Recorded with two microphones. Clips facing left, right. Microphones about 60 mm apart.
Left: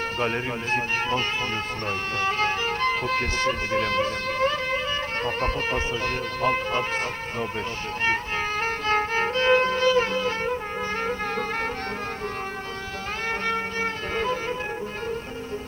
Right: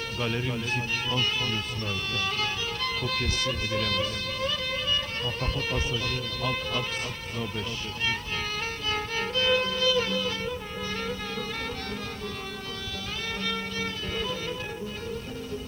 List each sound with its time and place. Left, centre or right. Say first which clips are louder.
0.2 s speech: left 1 dB; left
8.6 s music: left 7 dB; left
13.4 s music: left 4 dB; left